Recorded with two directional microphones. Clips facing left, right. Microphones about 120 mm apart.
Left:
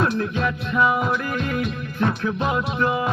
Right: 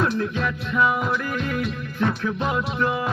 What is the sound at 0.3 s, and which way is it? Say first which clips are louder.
Music: left 1 dB; 20° left (ahead or behind).